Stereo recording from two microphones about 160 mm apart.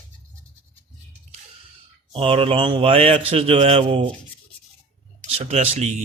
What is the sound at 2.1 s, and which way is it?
A man's voice, 35° right (ahead or behind).